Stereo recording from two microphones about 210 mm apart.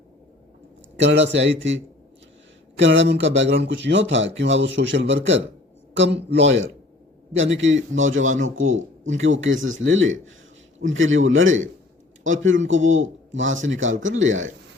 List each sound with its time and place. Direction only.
0.9 s speech: 60° right (ahead or behind)